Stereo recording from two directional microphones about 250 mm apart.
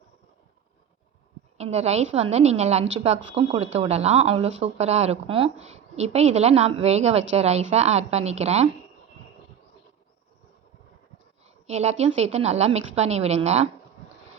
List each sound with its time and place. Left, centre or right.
1.5 s speech: right
11.4 s a woman's voice: right